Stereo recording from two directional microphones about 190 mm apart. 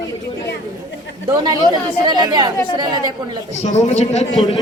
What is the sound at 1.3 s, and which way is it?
A woman's voice, 20° right (ahead or behind).